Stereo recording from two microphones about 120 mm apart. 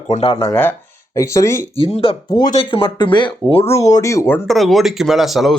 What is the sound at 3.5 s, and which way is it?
Speech, 55° left (ahead or behind).